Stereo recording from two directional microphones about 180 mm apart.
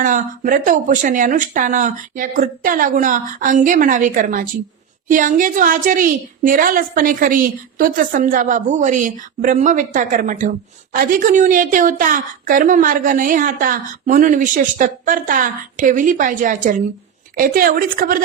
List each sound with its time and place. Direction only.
0.0 s a woman's voice: 50° right (ahead or behind)